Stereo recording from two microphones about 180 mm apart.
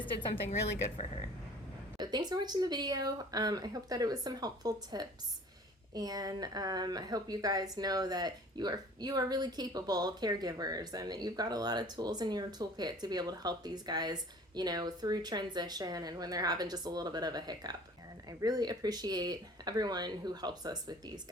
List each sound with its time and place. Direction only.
0.0 s a woman's voice: 25° left (ahead or behind)
2.0 s a woman's voice: 20° right (ahead or behind)